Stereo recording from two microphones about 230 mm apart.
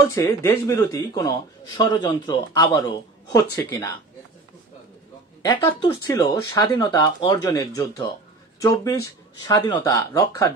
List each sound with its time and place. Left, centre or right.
0.1 s a man's voice: centre
5.4 s a man's voice: centre